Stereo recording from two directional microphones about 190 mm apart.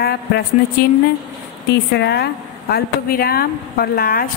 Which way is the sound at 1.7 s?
60° left (ahead or behind).